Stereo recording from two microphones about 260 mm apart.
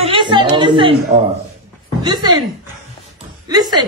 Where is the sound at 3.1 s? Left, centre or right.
Centre.